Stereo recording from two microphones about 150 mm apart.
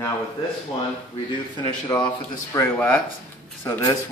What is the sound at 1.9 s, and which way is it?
Speech, 25° left (ahead or behind).